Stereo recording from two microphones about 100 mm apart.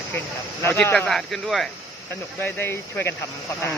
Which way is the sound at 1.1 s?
5° left (ahead or behind).